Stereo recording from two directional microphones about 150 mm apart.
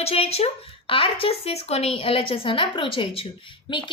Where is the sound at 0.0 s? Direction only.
40° left (ahead or behind).